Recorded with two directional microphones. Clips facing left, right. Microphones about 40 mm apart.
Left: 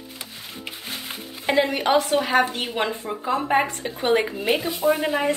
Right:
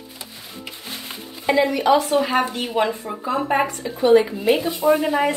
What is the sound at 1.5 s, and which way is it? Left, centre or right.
Speech, left.